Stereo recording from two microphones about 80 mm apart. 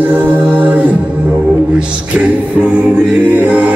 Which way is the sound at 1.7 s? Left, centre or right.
Centre.